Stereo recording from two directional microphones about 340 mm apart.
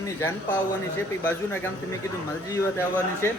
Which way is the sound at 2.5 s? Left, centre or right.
Centre.